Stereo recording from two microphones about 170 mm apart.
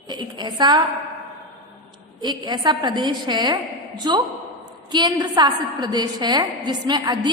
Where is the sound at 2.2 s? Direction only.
25° right (ahead or behind).